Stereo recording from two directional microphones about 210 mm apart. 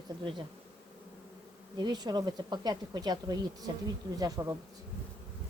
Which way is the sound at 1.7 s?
20° right (ahead or behind).